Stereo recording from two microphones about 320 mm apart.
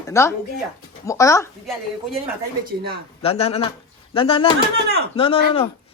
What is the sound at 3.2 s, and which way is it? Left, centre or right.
A man's voice, centre.